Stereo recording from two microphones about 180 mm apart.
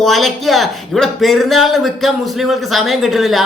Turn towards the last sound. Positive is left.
turn(degrees=0)  # may be behind; listen again after turning